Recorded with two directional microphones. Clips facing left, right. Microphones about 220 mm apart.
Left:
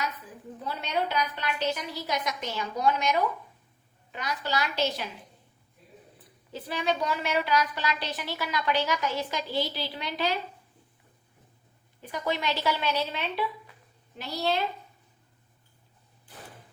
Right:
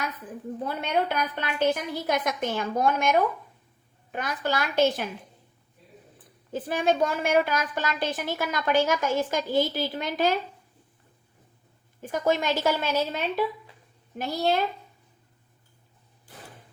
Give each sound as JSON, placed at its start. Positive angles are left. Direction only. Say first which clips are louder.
{"t": 0.6, "sound": "a woman's voice", "louder": "right 3 dB", "side_deg": -55}
{"t": 6.1, "sound": "a woman's voice", "louder": "right 8 dB", "side_deg": -50}
{"t": 12.0, "sound": "a woman's voice", "louder": "right 5 dB", "side_deg": -45}